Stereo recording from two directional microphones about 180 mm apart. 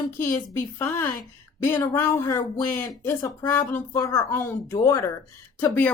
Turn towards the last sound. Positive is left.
turn(degrees=10)  # may be behind; listen again after turning